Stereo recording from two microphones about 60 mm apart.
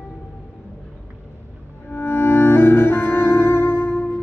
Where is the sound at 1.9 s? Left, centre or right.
Left.